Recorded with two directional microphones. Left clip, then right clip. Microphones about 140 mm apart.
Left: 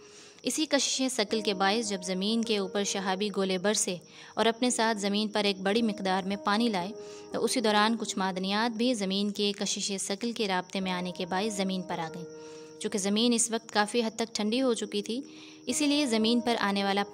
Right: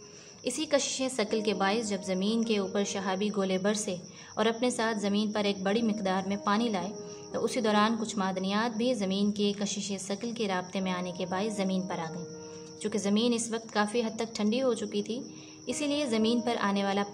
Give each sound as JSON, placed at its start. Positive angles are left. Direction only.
{"t": 0.5, "sound": "a woman's voice", "side_deg": 50}